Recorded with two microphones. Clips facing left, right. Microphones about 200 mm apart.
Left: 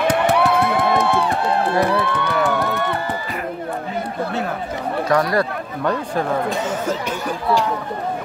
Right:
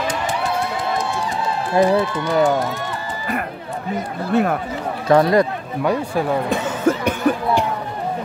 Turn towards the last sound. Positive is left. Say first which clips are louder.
# right 2 dB
turn(degrees=-55)  # may be behind; listen again after turning